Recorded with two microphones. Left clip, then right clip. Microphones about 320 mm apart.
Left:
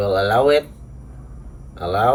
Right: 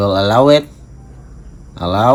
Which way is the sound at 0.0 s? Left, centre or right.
Centre.